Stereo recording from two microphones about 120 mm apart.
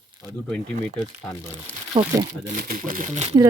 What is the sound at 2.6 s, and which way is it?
Speech, 90° right.